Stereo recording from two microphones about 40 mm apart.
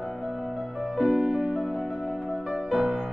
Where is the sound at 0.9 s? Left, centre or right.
Centre.